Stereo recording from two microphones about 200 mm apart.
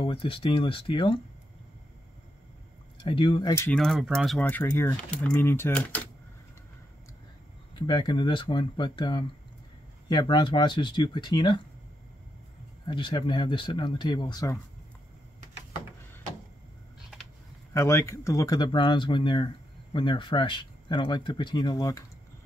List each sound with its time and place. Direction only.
0.0 s speech: 25° left (ahead or behind)
3.0 s speech: 25° left (ahead or behind)
3.5 s speech: 5° left (ahead or behind)
7.8 s speech: 25° left (ahead or behind)
12.8 s speech: 25° left (ahead or behind)
17.7 s speech: 15° left (ahead or behind)